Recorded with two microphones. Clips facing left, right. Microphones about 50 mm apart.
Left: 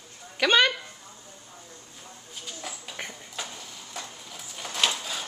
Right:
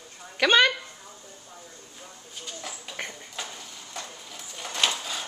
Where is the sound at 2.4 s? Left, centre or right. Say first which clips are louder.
Even; centre.